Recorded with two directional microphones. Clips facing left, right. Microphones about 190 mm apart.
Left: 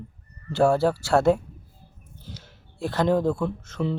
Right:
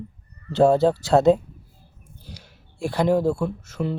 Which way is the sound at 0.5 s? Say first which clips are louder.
Right 3 dB; 20° right (ahead or behind).